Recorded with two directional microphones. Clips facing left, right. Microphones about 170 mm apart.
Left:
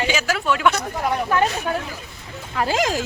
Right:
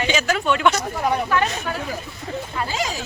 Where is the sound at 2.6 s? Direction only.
90° left.